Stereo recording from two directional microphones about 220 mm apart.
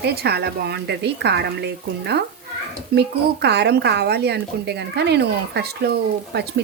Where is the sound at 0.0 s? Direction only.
45° right (ahead or behind).